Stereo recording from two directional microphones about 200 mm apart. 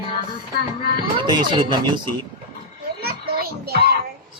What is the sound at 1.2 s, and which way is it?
Speech, 25° right (ahead or behind).